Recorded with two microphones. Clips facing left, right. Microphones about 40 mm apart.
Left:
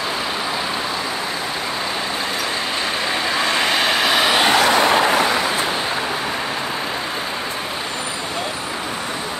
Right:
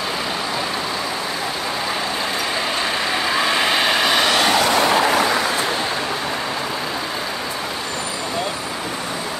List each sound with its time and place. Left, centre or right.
3.1 s vehicle: centre
4.5 s vehicle: left